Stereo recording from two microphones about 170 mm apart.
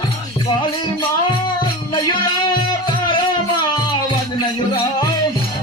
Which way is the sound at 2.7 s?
30° left (ahead or behind).